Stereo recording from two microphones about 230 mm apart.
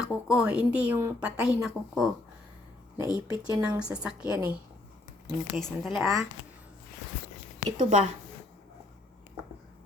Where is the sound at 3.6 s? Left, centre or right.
Centre.